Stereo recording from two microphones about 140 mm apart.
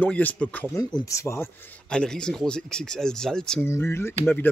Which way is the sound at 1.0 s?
20° left (ahead or behind).